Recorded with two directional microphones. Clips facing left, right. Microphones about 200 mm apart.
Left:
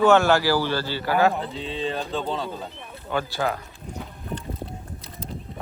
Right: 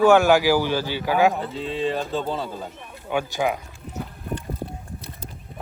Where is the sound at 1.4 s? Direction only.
Centre (ahead or behind).